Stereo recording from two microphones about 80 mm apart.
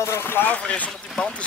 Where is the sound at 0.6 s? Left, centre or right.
Centre.